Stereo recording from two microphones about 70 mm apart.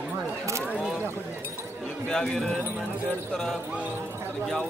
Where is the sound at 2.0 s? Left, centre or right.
Centre.